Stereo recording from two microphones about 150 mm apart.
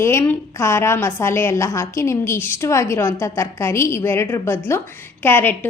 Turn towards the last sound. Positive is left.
turn(degrees=15)  # may be behind; listen again after turning